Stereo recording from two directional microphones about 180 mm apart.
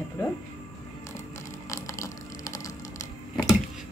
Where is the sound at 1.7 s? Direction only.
15° left (ahead or behind).